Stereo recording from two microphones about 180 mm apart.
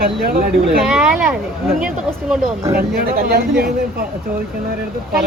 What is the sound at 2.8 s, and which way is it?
Speech, 60° right (ahead or behind).